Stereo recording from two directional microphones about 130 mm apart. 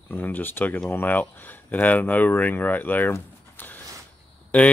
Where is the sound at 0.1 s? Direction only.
15° left (ahead or behind).